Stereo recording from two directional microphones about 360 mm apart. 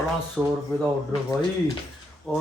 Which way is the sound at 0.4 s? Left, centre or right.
Centre.